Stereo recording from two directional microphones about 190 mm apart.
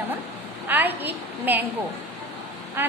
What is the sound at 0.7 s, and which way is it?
A woman's voice, 10° right (ahead or behind).